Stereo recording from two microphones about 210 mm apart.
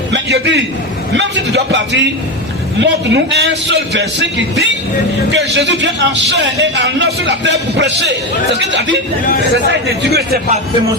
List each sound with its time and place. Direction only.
0.1 s a man's voice: 55° right (ahead or behind)